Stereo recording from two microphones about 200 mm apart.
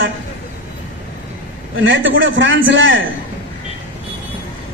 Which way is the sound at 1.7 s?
70° right (ahead or behind).